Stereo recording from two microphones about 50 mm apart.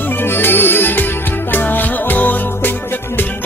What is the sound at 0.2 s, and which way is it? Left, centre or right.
Music, left.